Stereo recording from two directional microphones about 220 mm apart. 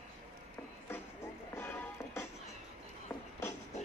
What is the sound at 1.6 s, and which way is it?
Music, 10° left (ahead or behind).